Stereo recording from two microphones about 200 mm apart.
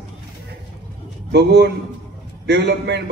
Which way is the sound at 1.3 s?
55° right (ahead or behind).